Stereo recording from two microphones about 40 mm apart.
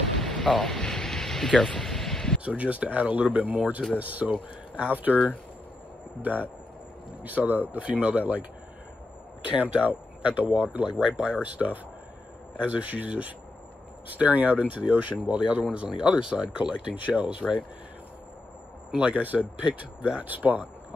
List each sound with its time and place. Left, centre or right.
0.2 s a sound: centre
1.6 s vehicle: centre
2.4 s speech: right
7.7 s speech: right
14.8 s speech: right
15.9 s speech: right
18.9 s speech: right
19.1 s speech: right